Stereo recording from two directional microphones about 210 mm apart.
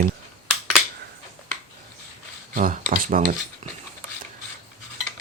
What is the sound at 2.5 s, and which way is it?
Speech, 40° right (ahead or behind).